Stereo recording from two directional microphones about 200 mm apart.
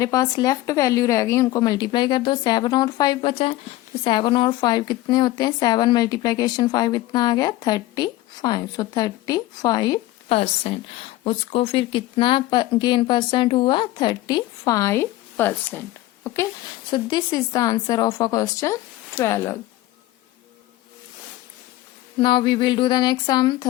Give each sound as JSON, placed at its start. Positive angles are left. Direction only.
{"t": 0.0, "sound": "a woman's voice", "side_deg": 15}
{"t": 22.2, "sound": "a woman's voice", "side_deg": 25}